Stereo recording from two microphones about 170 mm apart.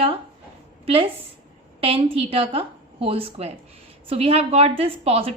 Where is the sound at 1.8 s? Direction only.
35° right (ahead or behind).